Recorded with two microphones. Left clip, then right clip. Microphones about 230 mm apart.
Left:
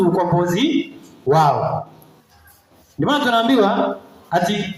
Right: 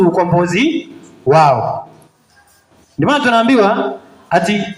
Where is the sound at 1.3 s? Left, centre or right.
Right.